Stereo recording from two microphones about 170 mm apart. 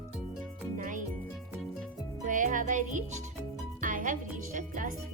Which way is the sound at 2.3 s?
50° right (ahead or behind).